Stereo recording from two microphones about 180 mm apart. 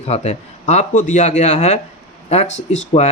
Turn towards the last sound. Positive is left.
turn(degrees=40)  # may be behind; listen again after turning